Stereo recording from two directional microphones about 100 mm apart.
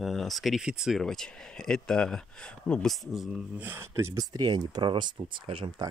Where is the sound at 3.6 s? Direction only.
25° right (ahead or behind); by 5.7 s 55° right (ahead or behind).